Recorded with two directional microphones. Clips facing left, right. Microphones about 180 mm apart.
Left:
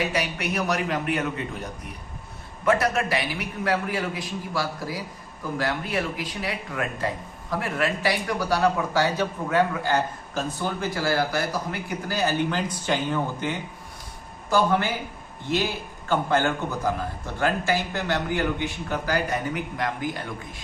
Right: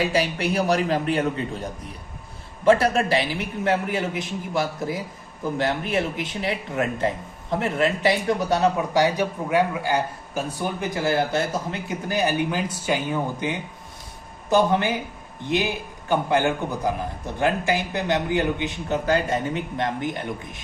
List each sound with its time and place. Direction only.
0.0 s a man's voice: 30° right (ahead or behind)
2.6 s a man's voice: 30° right (ahead or behind)